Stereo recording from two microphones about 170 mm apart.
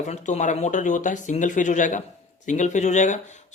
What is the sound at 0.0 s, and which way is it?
A man's voice, 45° left (ahead or behind).